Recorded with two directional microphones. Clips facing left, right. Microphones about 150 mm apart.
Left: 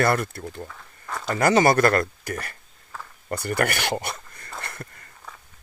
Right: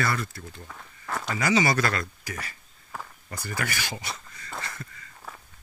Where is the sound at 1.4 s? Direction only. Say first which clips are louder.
Left 6 dB; 55° left (ahead or behind).